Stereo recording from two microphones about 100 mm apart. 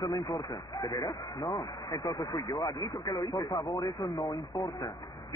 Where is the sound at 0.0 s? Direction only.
35° left (ahead or behind).